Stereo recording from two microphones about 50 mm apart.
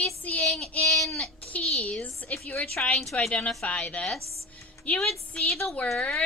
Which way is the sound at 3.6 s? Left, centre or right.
Left.